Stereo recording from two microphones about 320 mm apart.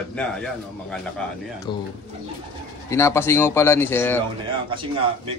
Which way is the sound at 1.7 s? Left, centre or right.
Centre.